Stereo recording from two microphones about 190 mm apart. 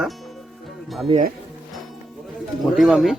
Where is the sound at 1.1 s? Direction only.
30° right (ahead or behind).